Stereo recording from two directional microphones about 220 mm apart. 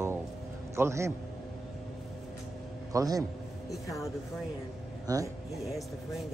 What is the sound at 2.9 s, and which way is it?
Speech, 15° right (ahead or behind).